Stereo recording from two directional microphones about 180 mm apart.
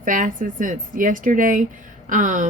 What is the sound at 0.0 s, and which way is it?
Speech, 45° right (ahead or behind).